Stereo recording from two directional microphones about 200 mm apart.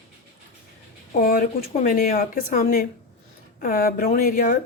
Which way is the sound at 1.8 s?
40° left (ahead or behind).